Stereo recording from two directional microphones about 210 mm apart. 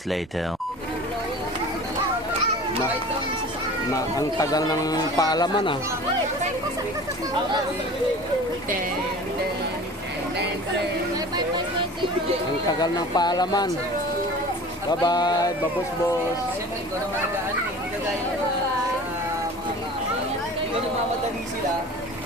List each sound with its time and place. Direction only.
3.9 s speech: 15° left (ahead or behind)
12.8 s speech: 20° left (ahead or behind)
14.8 s speech: 20° left (ahead or behind)